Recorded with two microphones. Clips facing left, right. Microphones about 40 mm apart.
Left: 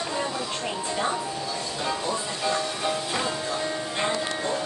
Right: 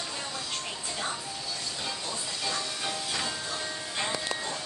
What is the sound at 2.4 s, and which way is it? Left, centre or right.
Music, left.